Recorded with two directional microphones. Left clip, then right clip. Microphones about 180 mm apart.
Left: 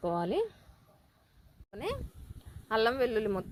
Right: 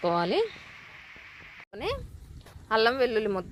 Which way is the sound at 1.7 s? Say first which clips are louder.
Right 4 dB; centre (ahead or behind).